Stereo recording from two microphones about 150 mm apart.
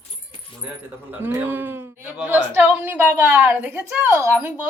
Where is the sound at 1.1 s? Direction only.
15° right (ahead or behind).